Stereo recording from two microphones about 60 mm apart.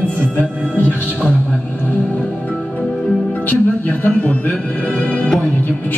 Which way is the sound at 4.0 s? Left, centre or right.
Left.